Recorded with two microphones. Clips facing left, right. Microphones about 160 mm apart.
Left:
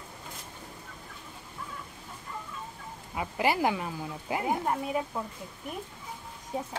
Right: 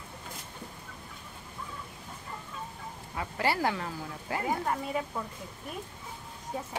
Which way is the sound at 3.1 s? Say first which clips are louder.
Left 2 dB; 15° left (ahead or behind).